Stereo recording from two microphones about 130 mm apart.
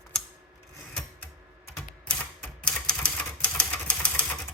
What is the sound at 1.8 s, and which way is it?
Typewriter, 5° left (ahead or behind).